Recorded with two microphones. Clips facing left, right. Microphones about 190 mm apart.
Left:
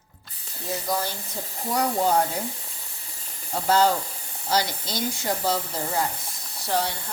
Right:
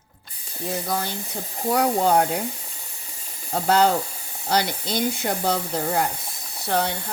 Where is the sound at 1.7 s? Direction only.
65° right (ahead or behind).